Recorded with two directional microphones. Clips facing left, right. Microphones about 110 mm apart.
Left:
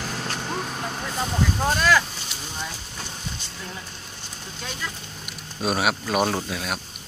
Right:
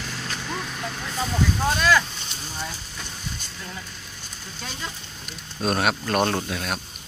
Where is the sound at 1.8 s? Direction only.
5° left (ahead or behind).